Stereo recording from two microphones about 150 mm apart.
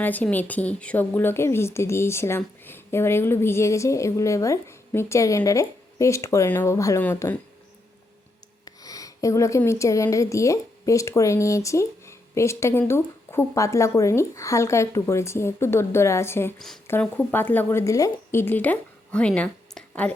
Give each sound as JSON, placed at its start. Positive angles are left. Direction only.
{"t": 0.0, "sound": "a woman's voice", "side_deg": 10}
{"t": 8.6, "sound": "a woman's voice", "side_deg": 25}